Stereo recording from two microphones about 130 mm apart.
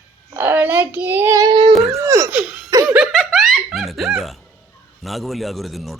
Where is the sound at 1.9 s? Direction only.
20° right (ahead or behind).